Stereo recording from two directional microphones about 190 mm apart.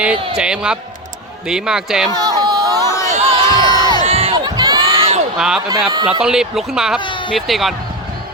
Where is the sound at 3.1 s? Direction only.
30° right (ahead or behind).